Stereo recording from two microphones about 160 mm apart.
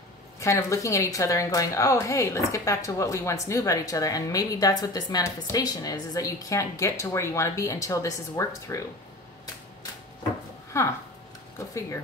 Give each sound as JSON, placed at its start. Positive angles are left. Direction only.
{"t": 0.4, "sound": "a woman's voice", "side_deg": 20}
{"t": 10.8, "sound": "speech", "side_deg": 20}